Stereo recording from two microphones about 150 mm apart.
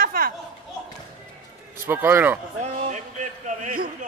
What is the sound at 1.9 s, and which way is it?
Speech, 15° right (ahead or behind).